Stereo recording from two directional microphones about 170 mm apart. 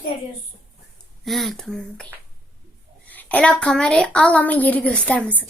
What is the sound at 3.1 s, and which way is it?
A woman's voice, 10° left (ahead or behind).